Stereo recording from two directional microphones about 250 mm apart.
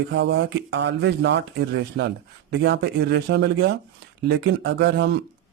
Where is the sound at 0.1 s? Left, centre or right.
Right.